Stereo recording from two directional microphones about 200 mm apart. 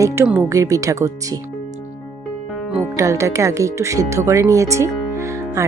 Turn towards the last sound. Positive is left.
turn(degrees=-15)  # may be behind; listen again after turning